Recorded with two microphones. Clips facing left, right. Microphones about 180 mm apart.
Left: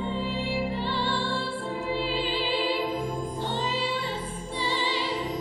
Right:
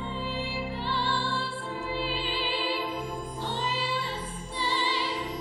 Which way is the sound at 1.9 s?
Centre (ahead or behind).